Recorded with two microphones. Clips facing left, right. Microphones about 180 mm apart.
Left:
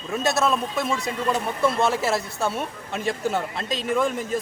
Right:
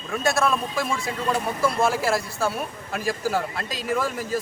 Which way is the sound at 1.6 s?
Centre (ahead or behind).